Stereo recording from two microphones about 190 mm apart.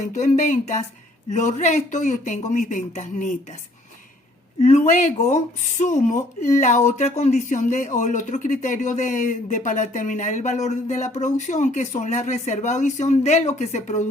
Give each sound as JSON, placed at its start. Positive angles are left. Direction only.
{"t": 0.1, "sound": "speech", "side_deg": 40}
{"t": 4.6, "sound": "speech", "side_deg": 35}